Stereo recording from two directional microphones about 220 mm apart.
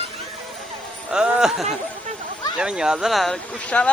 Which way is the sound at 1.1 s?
5° right (ahead or behind).